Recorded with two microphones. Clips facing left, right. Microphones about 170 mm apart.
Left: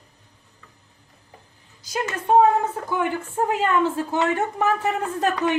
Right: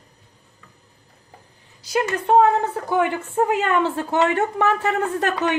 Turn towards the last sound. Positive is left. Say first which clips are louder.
# right 1 dB
turn(degrees=-70)  # may be behind; listen again after turning